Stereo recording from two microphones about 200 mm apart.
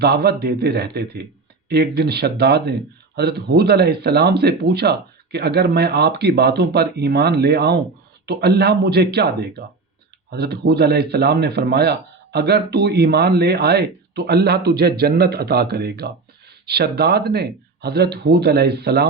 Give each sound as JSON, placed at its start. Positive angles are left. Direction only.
{"t": 0.0, "sound": "speech", "side_deg": -55}